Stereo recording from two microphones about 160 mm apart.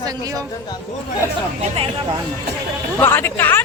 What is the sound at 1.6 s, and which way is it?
Speech, 35° right (ahead or behind).